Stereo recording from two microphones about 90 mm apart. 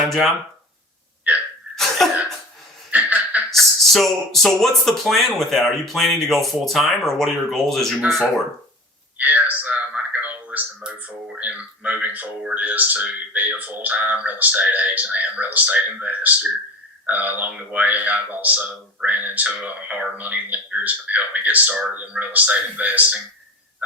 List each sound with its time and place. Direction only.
0.1 s speech: centre (ahead or behind)
1.7 s cough: centre (ahead or behind)
2.9 s a sound: 20° right (ahead or behind)
3.5 s speech: centre (ahead or behind)
9.1 s a sound: 15° right (ahead or behind)
10.8 s speech: 15° right (ahead or behind)